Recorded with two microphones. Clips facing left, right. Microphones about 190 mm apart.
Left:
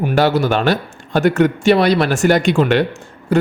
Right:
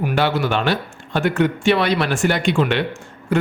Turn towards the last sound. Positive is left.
turn(degrees=40)  # may be behind; listen again after turning